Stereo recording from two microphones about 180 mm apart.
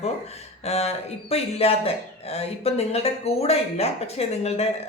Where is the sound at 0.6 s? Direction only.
35° left (ahead or behind).